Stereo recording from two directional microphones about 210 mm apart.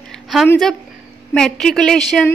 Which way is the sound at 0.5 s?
Centre (ahead or behind).